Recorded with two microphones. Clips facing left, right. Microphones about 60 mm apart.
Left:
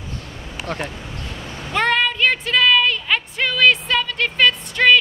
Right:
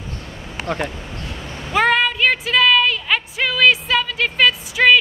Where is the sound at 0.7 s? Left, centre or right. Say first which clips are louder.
Right 3 dB; right.